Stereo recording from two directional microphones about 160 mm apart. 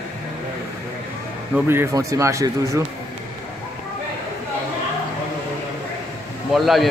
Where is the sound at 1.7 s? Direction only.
15° right (ahead or behind).